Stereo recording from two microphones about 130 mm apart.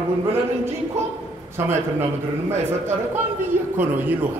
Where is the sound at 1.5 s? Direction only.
20° right (ahead or behind).